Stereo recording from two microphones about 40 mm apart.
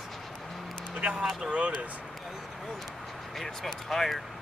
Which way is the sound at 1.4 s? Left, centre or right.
Right.